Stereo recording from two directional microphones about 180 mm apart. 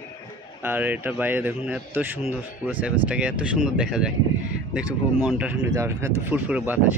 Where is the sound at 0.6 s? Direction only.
10° right (ahead or behind).